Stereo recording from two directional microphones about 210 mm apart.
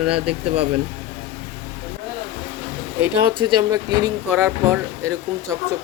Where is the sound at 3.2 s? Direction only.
20° right (ahead or behind).